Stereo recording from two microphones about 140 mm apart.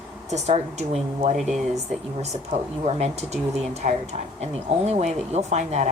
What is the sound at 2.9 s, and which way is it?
Speech, 50° right (ahead or behind).